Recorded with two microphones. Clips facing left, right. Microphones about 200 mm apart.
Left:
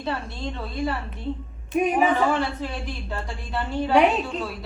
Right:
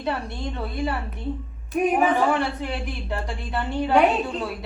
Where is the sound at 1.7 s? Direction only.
Centre (ahead or behind).